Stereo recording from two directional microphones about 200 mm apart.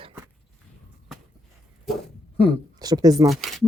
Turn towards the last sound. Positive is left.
turn(degrees=0)  # may be behind; listen again after turning